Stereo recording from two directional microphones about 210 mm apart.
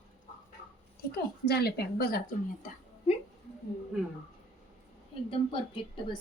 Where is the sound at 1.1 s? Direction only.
50° left (ahead or behind).